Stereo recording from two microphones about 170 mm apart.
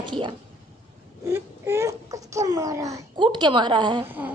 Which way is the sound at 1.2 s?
15° right (ahead or behind).